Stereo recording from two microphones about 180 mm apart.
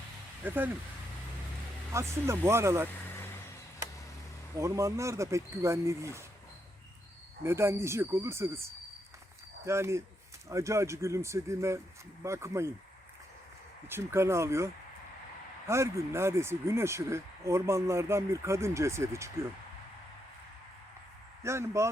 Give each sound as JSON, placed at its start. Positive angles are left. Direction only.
{"t": 0.4, "sound": "speech", "side_deg": -10}
{"t": 1.9, "sound": "speech", "side_deg": -15}
{"t": 4.5, "sound": "speech", "side_deg": -15}
{"t": 7.4, "sound": "speech", "side_deg": -15}
{"t": 13.8, "sound": "speech", "side_deg": -15}
{"t": 21.4, "sound": "speech", "side_deg": -15}